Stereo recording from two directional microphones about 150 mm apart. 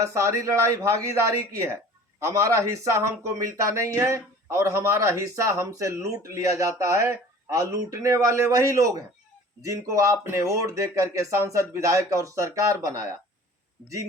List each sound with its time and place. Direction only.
0.0 s a man's voice: 20° right (ahead or behind)